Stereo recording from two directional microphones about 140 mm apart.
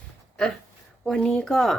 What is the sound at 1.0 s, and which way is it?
Speech, 5° left (ahead or behind).